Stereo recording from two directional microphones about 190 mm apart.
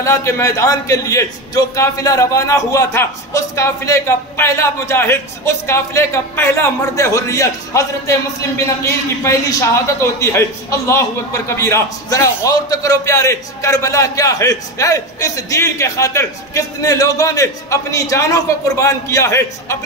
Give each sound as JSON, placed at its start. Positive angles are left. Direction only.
{"t": 0.0, "sound": "a man's voice", "side_deg": 15}